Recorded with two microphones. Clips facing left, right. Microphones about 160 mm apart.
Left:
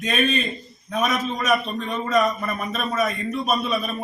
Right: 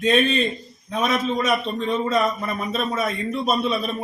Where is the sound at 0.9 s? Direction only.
30° right (ahead or behind).